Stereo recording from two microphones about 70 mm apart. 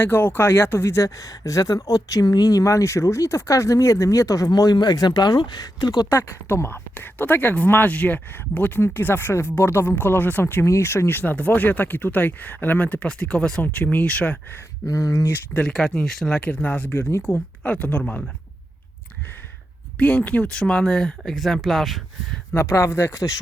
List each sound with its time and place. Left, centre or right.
0.0 s speech: left
6.1 s speech: left; by 14.3 s centre
14.8 s speech: left
15.6 s speech: centre
16.5 s speech: left
20.0 s speech: left; by 22.4 s centre
22.5 s speech: left